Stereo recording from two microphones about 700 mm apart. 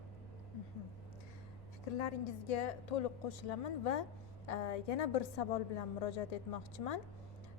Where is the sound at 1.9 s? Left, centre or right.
Left.